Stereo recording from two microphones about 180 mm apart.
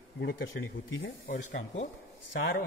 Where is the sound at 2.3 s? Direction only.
80° left.